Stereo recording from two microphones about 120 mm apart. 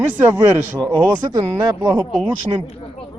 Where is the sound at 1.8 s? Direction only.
30° right (ahead or behind).